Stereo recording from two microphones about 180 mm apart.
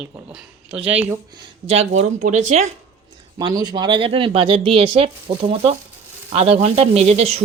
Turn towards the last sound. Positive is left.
turn(degrees=-35)  # may be behind; listen again after turning